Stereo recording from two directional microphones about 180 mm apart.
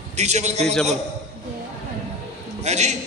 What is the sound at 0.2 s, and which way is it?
Speech, 40° right (ahead or behind).